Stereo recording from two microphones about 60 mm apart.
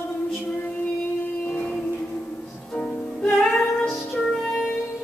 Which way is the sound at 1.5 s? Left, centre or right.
Left.